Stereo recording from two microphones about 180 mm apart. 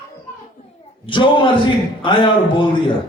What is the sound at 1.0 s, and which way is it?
A man's voice, 30° left (ahead or behind).